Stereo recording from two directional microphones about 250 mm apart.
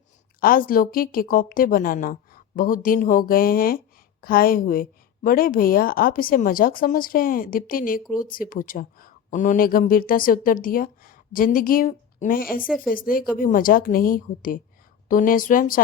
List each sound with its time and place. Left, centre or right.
0.3 s speech: left
12.6 s speech: centre
12.9 s speech: left